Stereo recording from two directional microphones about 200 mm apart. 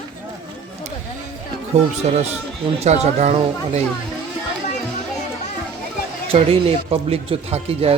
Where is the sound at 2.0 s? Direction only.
35° right (ahead or behind).